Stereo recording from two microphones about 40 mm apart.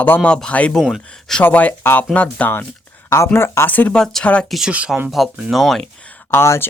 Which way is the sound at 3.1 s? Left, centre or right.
Left.